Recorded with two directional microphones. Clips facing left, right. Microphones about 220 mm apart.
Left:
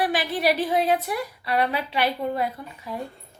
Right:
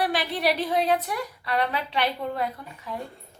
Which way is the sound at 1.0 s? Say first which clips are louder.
Left 2 dB; 10° left (ahead or behind).